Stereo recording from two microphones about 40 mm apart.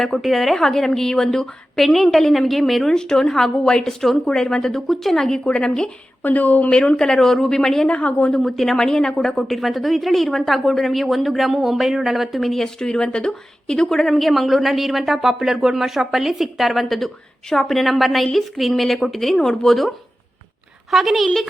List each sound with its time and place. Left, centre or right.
0.0 s a woman's voice: centre
2.9 s a woman's voice: centre
6.2 s speech: left
6.7 s a woman's voice: left
7.0 s a woman's voice: centre
7.9 s a woman's voice: left
8.3 s a woman's voice: centre
20.9 s a woman's voice: centre